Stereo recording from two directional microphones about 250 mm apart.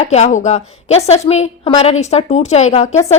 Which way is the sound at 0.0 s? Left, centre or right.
Left.